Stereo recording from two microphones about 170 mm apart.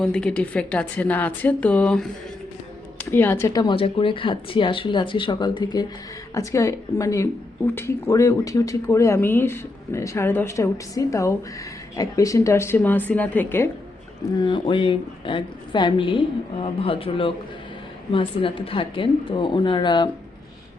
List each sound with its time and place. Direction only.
0.0 s speech: 5° left (ahead or behind)
3.1 s a woman's voice: 10° left (ahead or behind)
14.3 s a woman's voice: 25° left (ahead or behind)